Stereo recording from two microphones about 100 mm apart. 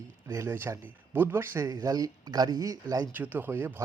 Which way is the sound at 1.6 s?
35° right (ahead or behind).